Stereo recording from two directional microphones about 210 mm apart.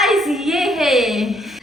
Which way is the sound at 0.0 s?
Centre (ahead or behind).